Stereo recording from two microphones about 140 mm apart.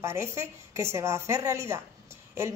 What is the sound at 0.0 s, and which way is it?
Speech, 20° right (ahead or behind).